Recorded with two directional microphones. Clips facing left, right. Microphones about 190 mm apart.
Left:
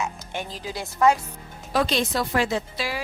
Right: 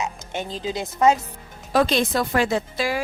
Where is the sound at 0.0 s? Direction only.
20° right (ahead or behind).